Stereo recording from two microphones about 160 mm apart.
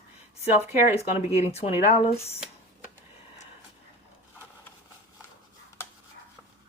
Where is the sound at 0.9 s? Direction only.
40° left (ahead or behind).